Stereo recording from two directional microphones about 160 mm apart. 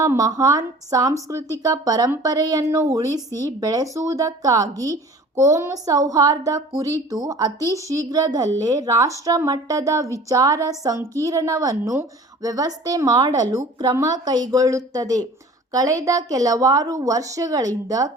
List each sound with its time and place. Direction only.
0.0 s a woman's voice: 20° right (ahead or behind)